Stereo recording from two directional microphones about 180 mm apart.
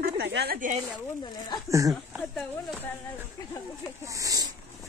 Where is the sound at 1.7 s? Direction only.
15° right (ahead or behind).